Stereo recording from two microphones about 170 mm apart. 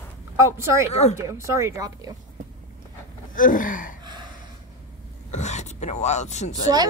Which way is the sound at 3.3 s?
50° left (ahead or behind).